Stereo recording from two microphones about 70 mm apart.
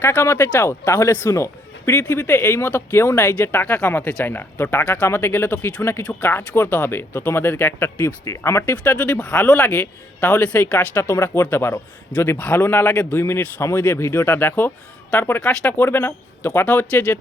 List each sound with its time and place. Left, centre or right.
0.1 s speech: left
8.7 s speech: left
9.0 s speech: centre
9.6 s speech: left
13.6 s speech: left